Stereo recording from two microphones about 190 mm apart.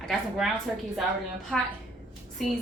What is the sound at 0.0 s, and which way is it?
Speech, 5° left (ahead or behind).